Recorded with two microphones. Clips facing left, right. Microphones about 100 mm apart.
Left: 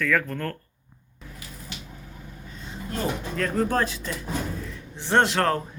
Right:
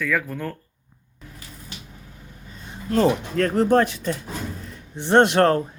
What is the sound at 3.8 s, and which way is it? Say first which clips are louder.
Speech: right 6 dB; 55° right (ahead or behind).